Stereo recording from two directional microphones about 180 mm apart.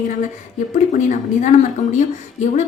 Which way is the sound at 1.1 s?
45° left (ahead or behind).